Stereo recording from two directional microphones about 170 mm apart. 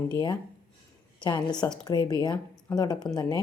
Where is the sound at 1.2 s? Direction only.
25° left (ahead or behind).